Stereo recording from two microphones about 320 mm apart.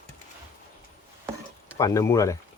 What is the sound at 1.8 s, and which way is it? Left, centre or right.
Speech, centre.